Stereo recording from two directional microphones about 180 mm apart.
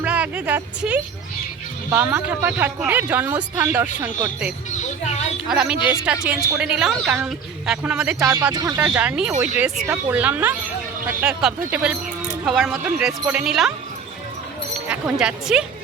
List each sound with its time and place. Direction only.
0.0 s speech: 5° right (ahead or behind)
4.8 s speech: 35° left (ahead or behind)
5.5 s speech: 5° right (ahead or behind)
8.5 s speech: 20° right (ahead or behind)
8.8 s speech: 5° right (ahead or behind)
14.8 s speech: 5° right (ahead or behind)